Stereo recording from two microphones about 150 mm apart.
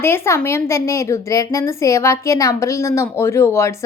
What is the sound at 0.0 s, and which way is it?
A woman's voice, 15° left (ahead or behind).